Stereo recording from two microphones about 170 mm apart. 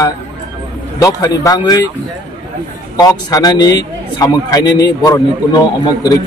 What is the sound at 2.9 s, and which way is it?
A man's voice, 20° left (ahead or behind).